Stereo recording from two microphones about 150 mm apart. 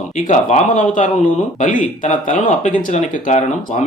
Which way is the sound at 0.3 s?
55° left (ahead or behind).